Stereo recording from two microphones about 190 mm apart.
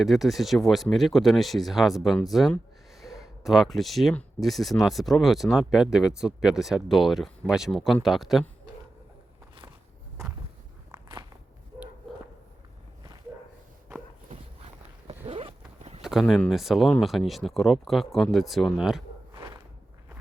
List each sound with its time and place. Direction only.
0.0 s speech: centre (ahead or behind)
15.0 s zipper: 30° right (ahead or behind)
16.0 s speech: centre (ahead or behind)
19.3 s walk: 25° right (ahead or behind)